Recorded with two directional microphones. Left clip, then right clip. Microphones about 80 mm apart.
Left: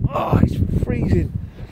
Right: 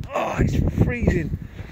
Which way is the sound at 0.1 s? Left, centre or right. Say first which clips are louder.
Left 2 dB; left.